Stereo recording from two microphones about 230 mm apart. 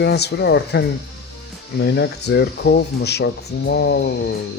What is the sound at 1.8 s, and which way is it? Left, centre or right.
Speech, left.